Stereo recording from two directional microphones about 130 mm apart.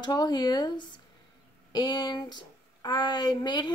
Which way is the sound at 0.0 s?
35° left (ahead or behind).